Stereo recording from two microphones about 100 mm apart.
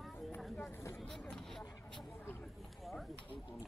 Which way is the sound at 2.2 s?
20° left (ahead or behind).